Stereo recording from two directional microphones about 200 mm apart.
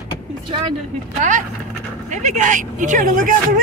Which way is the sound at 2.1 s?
35° right (ahead or behind).